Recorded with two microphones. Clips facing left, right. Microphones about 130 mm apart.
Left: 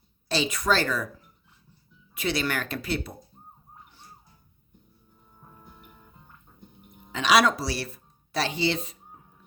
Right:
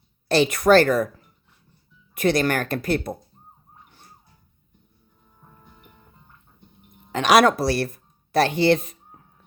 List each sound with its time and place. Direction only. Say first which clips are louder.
0.3 s speech: right 9 dB; 55° right (ahead or behind)
2.1 s speech: right 8 dB; 50° right (ahead or behind)
7.1 s speech: right 5 dB; 50° right (ahead or behind)